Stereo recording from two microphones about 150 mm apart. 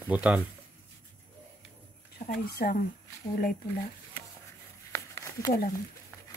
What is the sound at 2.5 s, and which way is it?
Speech, 85° left.